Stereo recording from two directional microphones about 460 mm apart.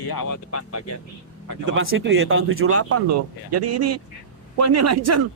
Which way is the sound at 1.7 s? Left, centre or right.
Right.